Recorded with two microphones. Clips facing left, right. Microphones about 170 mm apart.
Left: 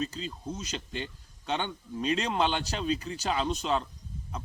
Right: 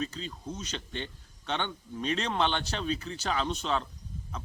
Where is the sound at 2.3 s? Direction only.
10° left (ahead or behind).